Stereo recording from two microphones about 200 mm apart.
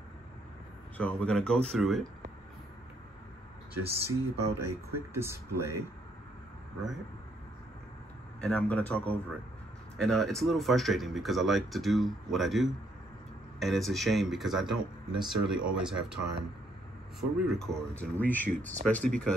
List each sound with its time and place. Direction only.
0.9 s speech: 5° left (ahead or behind)
4.1 s speech: 15° right (ahead or behind)
8.4 s a man's voice: 5° left (ahead or behind)
17.2 s speech: centre (ahead or behind)
18.5 s speech: 40° right (ahead or behind)
18.9 s speech: 5° left (ahead or behind)